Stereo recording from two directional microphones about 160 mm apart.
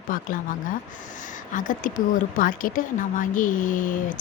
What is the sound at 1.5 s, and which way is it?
Speech, 55° left (ahead or behind).